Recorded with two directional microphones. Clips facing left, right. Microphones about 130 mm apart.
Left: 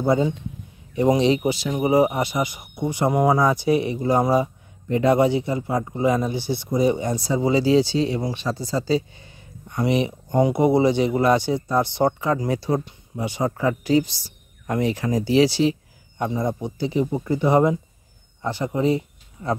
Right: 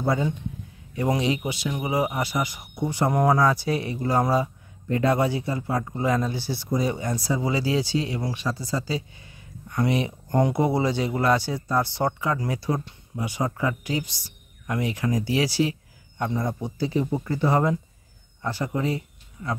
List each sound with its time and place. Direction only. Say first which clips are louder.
0.0 s speech: left 5 dB; 20° left (ahead or behind)
9.8 s speech: left 3 dB; 20° left (ahead or behind)